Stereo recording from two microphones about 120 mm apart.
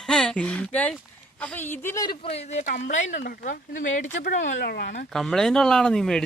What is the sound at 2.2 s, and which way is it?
A woman's voice, 60° left (ahead or behind).